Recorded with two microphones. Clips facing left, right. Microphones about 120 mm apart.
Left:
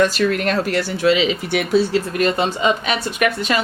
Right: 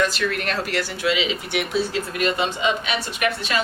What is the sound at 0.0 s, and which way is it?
Speech, 40° left (ahead or behind).